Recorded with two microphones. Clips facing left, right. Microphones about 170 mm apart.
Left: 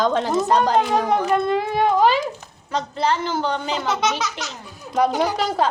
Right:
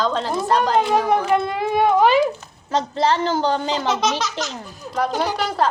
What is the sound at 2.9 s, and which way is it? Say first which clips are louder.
Speech: right 2 dB; 35° right (ahead or behind).